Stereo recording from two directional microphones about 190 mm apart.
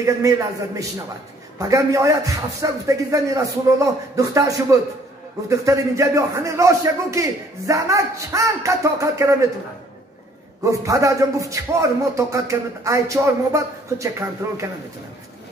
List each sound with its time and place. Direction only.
0.0 s a man's voice: 15° right (ahead or behind)
10.6 s a man's voice: 15° right (ahead or behind)